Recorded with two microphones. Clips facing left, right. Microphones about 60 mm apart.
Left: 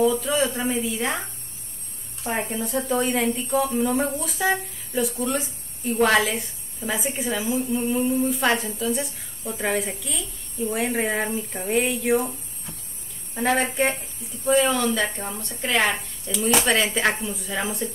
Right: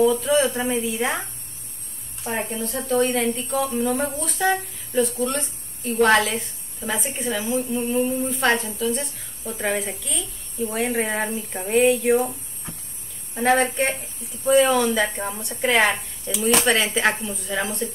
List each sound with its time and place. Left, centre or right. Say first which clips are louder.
0.0 s a woman's voice: right 3 dB; centre
2.2 s a woman's voice: even; centre
13.3 s a woman's voice: right 3 dB; centre